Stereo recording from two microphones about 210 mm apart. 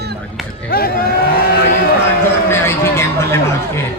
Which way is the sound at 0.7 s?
45° left (ahead or behind).